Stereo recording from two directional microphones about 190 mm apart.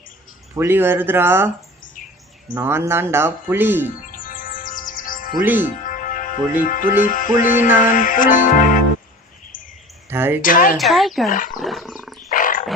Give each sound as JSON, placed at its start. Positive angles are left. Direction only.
{"t": 0.5, "sound": "speech", "side_deg": -15}
{"t": 2.0, "sound": "bird", "side_deg": 45}
{"t": 2.6, "sound": "speech", "side_deg": -15}
{"t": 4.1, "sound": "music", "side_deg": 45}
{"t": 5.4, "sound": "speech", "side_deg": -10}
{"t": 5.6, "sound": "music", "side_deg": 45}
{"t": 10.1, "sound": "speech", "side_deg": -10}
{"t": 10.4, "sound": "music", "side_deg": 45}
{"t": 10.8, "sound": "speech", "side_deg": 0}
{"t": 11.3, "sound": "music", "side_deg": 45}
{"t": 11.6, "sound": "wild animals", "side_deg": 0}
{"t": 12.3, "sound": "wild animals", "side_deg": 45}